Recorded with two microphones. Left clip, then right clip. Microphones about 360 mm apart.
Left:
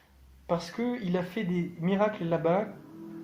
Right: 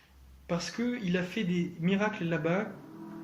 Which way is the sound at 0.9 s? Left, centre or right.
Centre.